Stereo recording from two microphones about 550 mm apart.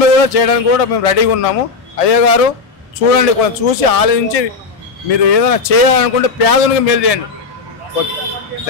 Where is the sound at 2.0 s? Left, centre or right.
Left.